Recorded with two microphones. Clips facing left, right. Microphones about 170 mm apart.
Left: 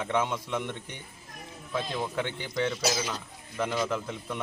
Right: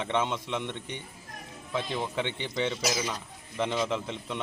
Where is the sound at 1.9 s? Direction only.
5° left (ahead or behind).